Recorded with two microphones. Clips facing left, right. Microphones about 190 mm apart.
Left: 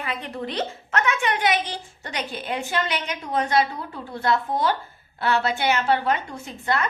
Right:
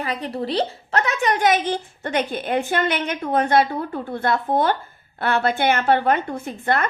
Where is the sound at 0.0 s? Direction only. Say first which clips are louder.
Right 4 dB; 35° right (ahead or behind).